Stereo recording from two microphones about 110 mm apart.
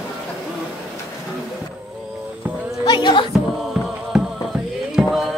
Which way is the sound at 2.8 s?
45° left (ahead or behind).